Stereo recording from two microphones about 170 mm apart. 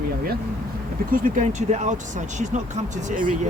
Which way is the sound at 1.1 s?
50° right (ahead or behind).